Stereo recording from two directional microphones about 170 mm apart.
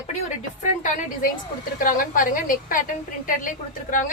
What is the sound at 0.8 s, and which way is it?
A woman's voice, 45° left (ahead or behind).